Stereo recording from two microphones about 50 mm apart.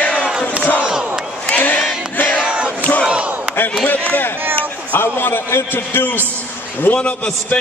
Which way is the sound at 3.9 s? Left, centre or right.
Left.